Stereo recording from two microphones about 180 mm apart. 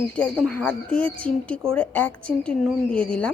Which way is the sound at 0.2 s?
5° left (ahead or behind).